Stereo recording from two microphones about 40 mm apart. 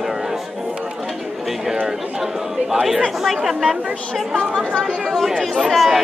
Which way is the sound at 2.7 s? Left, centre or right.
Centre.